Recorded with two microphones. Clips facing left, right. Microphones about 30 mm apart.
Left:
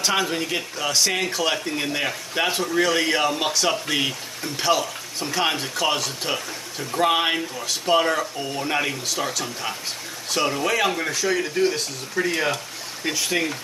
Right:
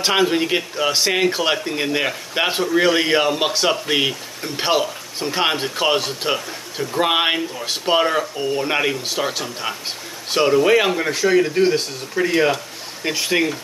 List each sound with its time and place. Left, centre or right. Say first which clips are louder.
0.0 s speech: right 5 dB; right
4.6 s speech: right 3 dB; right
6.3 s speech: right 4 dB; centre
7.6 s speech: right 2 dB; right
13.0 s speech: right 4 dB; right